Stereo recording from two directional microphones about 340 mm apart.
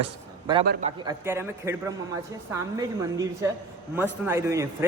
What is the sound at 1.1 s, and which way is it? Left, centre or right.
Speech, centre.